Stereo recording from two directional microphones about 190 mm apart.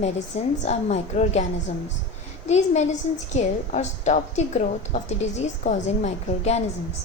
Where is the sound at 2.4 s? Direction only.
35° left (ahead or behind).